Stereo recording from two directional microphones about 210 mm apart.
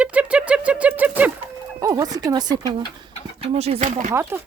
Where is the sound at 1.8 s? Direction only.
15° right (ahead or behind).